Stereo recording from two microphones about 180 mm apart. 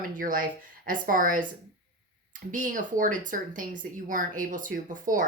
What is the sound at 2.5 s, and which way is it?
Speech, 45° right (ahead or behind).